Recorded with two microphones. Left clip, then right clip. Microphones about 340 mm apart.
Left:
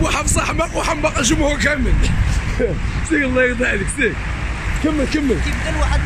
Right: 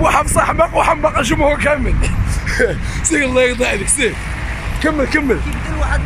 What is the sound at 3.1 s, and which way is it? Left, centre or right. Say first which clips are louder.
Speech: right 3 dB; centre.